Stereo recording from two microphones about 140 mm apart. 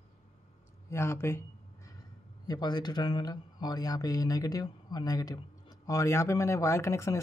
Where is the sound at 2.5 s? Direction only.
30° left (ahead or behind).